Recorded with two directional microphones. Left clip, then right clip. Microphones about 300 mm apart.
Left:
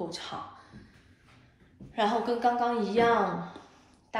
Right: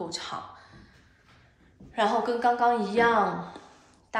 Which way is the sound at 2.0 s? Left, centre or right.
Right.